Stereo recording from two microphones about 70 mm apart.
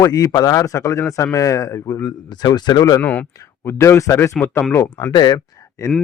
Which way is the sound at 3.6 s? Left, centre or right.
Left.